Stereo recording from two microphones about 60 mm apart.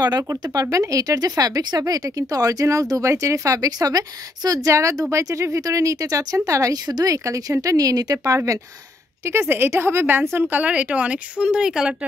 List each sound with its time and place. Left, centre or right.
0.0 s speech: right
7.6 s speech: right
9.2 s a woman's voice: right
10.5 s speech: right